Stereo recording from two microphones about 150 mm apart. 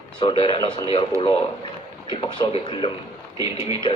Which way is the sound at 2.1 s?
35° left (ahead or behind).